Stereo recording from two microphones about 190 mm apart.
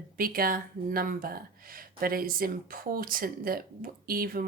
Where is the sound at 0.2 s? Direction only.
50° right (ahead or behind).